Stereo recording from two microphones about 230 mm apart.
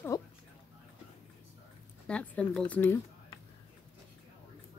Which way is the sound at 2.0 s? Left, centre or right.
Centre.